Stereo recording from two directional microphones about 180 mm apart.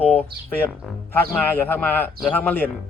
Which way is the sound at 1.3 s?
10° left (ahead or behind).